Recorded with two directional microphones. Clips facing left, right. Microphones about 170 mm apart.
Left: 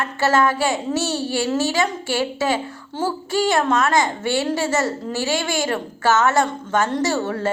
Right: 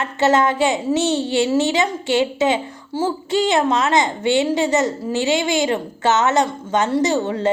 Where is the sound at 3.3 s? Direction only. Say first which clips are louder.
Right 1 dB; 20° right (ahead or behind).